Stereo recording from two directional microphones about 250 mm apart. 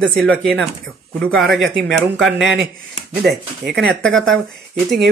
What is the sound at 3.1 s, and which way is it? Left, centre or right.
Speech, right.